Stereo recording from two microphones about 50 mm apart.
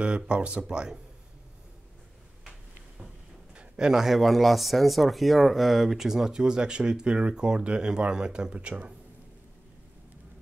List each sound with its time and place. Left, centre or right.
0.0 s speech: right
3.5 s speech: centre